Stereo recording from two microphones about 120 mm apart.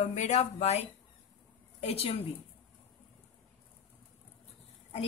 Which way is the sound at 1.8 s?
55° left (ahead or behind).